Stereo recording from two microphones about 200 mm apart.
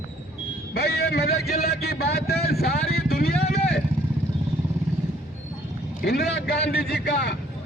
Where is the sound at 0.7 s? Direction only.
50° left (ahead or behind).